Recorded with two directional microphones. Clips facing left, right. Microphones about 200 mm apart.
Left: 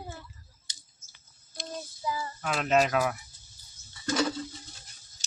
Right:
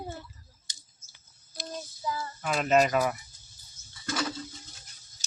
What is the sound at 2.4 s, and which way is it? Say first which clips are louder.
Speech: right 2 dB; centre (ahead or behind).